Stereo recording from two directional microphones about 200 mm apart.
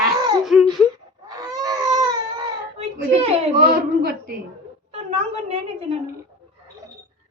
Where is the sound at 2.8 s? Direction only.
30° right (ahead or behind).